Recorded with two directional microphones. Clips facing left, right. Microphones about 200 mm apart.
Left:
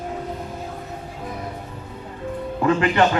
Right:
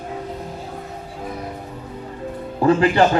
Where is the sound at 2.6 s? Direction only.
35° right (ahead or behind).